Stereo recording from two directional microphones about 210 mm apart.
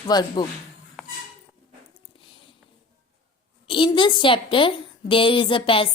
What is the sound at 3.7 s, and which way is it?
A woman's voice, 25° left (ahead or behind).